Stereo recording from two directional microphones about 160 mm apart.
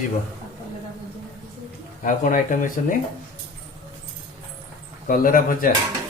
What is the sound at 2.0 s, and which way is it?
Speech, 55° left (ahead or behind).